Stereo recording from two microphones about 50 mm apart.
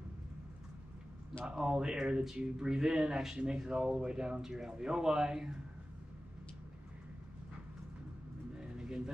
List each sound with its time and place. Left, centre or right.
1.6 s speech: centre
8.5 s vehicle: centre